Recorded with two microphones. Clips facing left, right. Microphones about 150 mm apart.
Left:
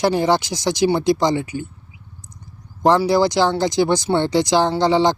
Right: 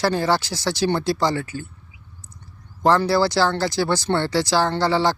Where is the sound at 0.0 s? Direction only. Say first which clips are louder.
Left 3 dB; 15° left (ahead or behind).